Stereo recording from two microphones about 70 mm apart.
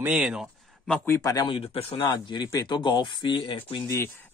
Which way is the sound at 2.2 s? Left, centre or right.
Left.